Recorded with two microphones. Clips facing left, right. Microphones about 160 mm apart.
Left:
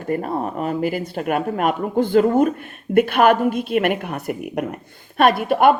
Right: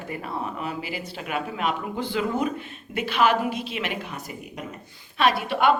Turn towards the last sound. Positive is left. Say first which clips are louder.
# left 6 dB
turn(degrees=50)  # may be behind; listen again after turning